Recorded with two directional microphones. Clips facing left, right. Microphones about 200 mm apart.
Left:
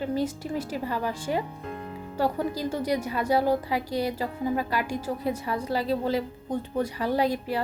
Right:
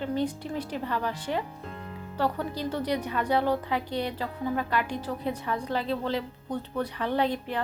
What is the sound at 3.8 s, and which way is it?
Speech, 40° left (ahead or behind).